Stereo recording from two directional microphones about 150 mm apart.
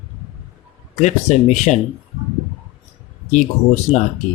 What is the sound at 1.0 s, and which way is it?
Speech, 50° left (ahead or behind).